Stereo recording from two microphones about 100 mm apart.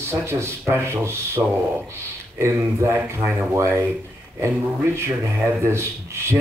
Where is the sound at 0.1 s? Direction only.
25° right (ahead or behind).